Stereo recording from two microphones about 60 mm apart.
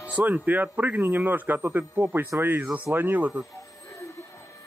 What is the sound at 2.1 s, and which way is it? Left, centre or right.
Speech, right.